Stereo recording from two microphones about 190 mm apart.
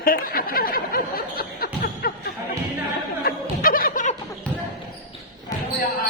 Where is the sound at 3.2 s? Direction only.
50° left (ahead or behind).